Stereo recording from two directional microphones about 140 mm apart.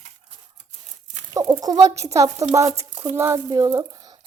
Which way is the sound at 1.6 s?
25° right (ahead or behind).